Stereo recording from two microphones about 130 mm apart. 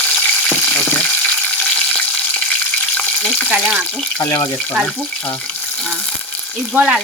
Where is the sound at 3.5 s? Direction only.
10° right (ahead or behind).